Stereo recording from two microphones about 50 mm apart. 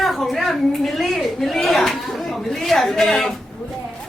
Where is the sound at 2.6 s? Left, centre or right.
Centre.